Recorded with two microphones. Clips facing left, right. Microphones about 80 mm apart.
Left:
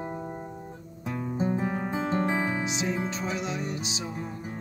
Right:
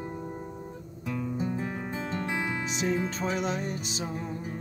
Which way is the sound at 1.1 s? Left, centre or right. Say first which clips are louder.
Left 3 dB; left.